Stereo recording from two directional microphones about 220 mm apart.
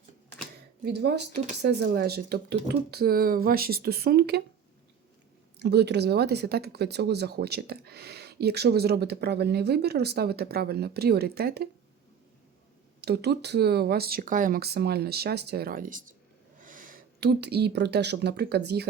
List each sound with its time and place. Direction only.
0.9 s speech: 50° right (ahead or behind)
5.5 s speech: 50° right (ahead or behind)
13.0 s speech: 50° right (ahead or behind)